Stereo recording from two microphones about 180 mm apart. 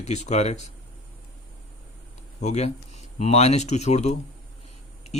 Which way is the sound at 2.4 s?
40° left (ahead or behind).